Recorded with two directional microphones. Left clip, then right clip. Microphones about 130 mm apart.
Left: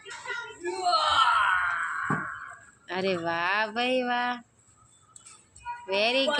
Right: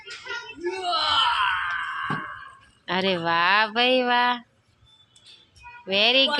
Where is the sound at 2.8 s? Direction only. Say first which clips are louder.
Right 5 dB; 30° right (ahead or behind).